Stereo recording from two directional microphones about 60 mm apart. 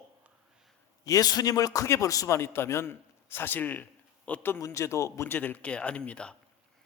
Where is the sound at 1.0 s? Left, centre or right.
Left.